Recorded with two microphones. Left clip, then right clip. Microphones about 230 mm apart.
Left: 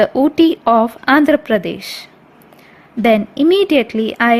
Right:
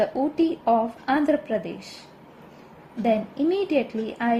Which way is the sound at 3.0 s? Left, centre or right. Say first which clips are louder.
Left 10 dB; left.